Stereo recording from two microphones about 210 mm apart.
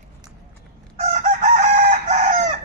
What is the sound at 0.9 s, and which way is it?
Chicken, 35° right (ahead or behind).